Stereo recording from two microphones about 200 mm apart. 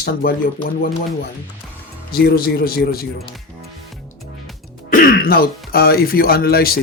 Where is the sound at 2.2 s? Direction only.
50° left (ahead or behind).